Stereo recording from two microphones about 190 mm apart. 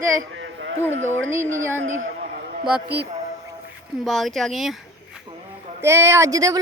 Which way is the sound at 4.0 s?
Centre (ahead or behind).